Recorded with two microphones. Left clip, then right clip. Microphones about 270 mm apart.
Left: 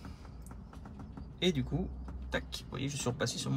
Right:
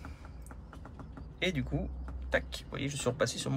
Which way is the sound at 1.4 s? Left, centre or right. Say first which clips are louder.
Even; centre.